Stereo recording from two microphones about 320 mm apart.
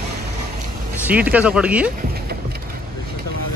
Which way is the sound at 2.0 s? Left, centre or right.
Right.